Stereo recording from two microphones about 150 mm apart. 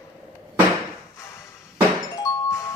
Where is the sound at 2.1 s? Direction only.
20° left (ahead or behind).